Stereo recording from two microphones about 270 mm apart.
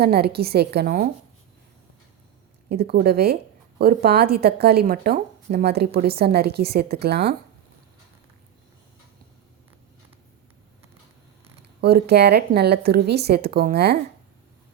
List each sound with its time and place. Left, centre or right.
0.0 s speech: right
2.6 s speech: right
11.8 s speech: right